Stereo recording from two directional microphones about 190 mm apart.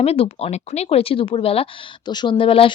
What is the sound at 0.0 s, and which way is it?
Speech, 30° left (ahead or behind).